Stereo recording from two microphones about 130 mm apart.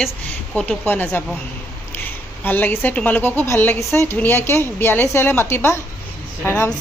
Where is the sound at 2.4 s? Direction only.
15° left (ahead or behind).